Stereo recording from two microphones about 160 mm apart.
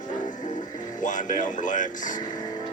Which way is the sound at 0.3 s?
50° left (ahead or behind).